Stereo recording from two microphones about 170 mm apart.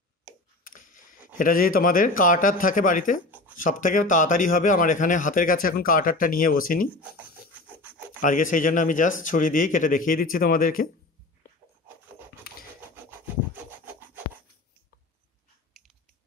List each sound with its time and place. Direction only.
0.7 s speech: 50° left (ahead or behind)
3.3 s a sound: 10° right (ahead or behind)
3.6 s speech: 50° left (ahead or behind)
7.7 s rub: 10° right (ahead or behind)
8.2 s speech: 50° left (ahead or behind)
12.5 s scratch: 65° left (ahead or behind)
13.5 s rub: 10° right (ahead or behind)